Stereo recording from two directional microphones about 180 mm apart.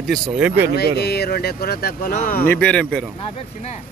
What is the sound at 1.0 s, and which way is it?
Speech, 65° left (ahead or behind).